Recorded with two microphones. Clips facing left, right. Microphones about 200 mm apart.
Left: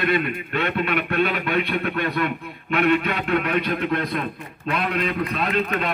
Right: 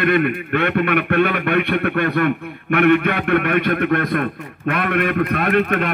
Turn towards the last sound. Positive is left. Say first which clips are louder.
# right 5 dB
turn(degrees=-60)  # may be behind; listen again after turning